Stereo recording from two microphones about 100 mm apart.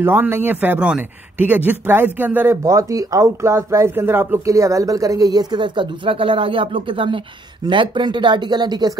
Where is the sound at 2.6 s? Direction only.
35° right (ahead or behind).